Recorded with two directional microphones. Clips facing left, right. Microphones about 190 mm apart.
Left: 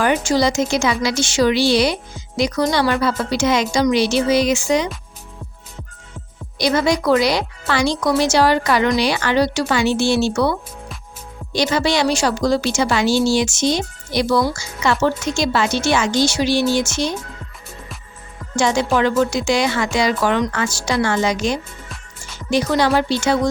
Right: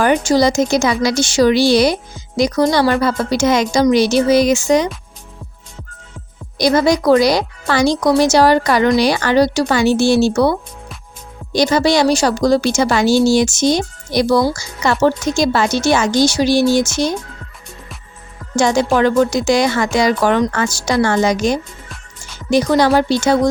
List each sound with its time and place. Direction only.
0.0 s a woman's voice: 40° right (ahead or behind)
6.6 s a woman's voice: 40° right (ahead or behind)
18.5 s a woman's voice: 40° right (ahead or behind)